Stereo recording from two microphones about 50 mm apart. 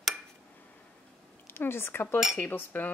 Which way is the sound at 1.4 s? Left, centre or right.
Left.